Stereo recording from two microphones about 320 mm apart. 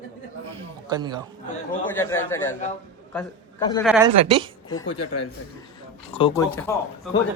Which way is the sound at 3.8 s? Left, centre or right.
Centre.